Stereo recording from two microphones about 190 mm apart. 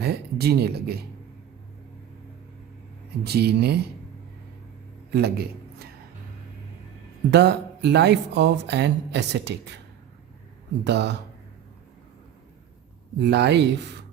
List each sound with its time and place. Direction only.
0.0 s speech: 55° right (ahead or behind)
3.2 s speech: 55° right (ahead or behind)
5.1 s a man's voice: 55° right (ahead or behind)
7.3 s speech: 65° right (ahead or behind)
10.8 s speech: 65° right (ahead or behind)
13.1 s speech: 60° right (ahead or behind)